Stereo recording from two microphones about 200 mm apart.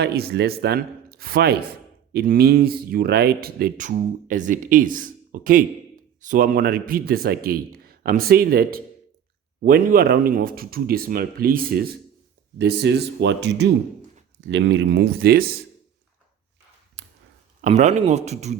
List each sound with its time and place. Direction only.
0.0 s speech: 50° right (ahead or behind)
17.6 s a man's voice: 35° right (ahead or behind)